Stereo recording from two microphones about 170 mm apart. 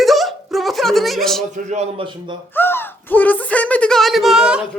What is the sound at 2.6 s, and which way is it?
Gasp, 10° left (ahead or behind).